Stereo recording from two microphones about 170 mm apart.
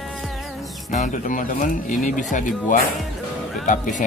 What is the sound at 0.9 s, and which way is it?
Speech, 45° left (ahead or behind).